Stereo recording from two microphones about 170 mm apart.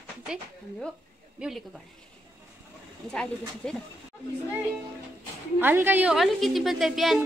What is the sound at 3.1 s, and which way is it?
Speech, 5° left (ahead or behind).